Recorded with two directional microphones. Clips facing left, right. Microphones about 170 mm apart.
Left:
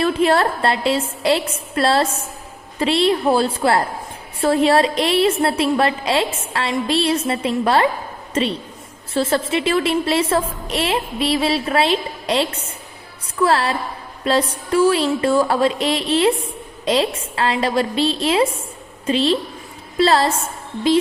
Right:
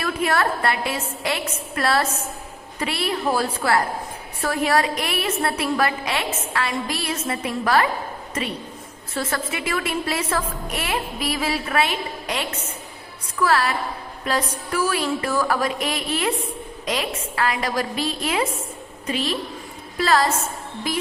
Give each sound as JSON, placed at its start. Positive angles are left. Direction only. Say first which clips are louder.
{"t": 0.0, "sound": "a woman's voice", "louder": "left 6 dB", "side_deg": 30}
{"t": 9.1, "sound": "a woman's voice", "louder": "left 8 dB", "side_deg": 30}